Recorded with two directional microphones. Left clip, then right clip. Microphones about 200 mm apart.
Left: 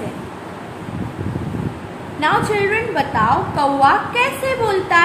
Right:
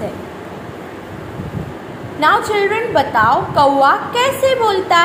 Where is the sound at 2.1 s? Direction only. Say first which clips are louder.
Right 3 dB; 20° right (ahead or behind).